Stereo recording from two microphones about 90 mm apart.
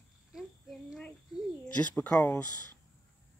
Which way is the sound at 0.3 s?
5° right (ahead or behind).